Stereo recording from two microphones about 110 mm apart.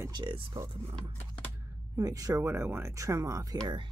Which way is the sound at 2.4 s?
20° right (ahead or behind).